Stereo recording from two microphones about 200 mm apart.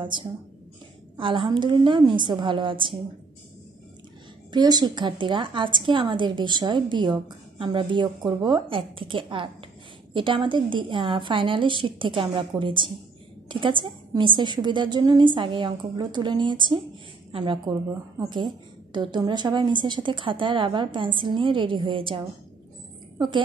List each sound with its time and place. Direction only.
0.0 s a woman's voice: 25° right (ahead or behind)
4.5 s a woman's voice: 20° right (ahead or behind)